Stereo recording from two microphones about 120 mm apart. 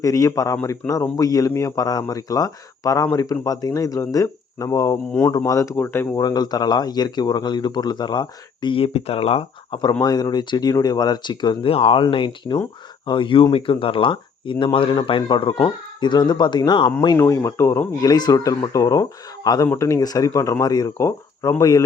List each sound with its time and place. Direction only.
0.0 s speech: 30° left (ahead or behind)
6.1 s speech: 35° left (ahead or behind); by 9.8 s 50° left (ahead or behind)
10.0 s speech: 35° left (ahead or behind)
11.7 s speech: 50° left (ahead or behind)
12.0 s speech: 40° left (ahead or behind)
17.2 s speech: 25° left (ahead or behind)